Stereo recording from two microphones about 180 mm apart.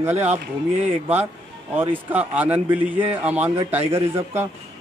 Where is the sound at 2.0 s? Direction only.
10° right (ahead or behind).